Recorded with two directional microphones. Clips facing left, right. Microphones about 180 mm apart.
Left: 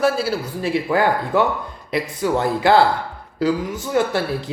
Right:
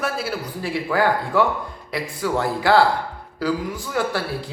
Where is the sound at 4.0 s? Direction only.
20° left (ahead or behind).